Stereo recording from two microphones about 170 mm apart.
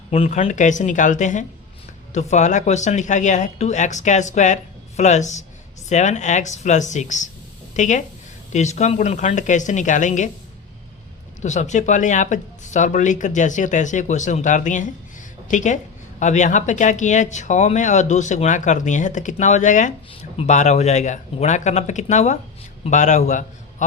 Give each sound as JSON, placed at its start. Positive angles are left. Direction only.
{"t": 0.1, "sound": "speech", "side_deg": 40}
{"t": 11.4, "sound": "speech", "side_deg": 45}